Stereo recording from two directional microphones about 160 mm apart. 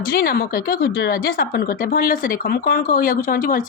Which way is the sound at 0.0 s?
65° left (ahead or behind).